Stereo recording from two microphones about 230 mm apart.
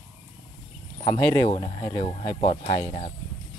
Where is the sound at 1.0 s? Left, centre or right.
Centre.